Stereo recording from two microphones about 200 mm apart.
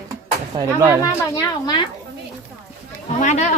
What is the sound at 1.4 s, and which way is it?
Speech, 20° left (ahead or behind).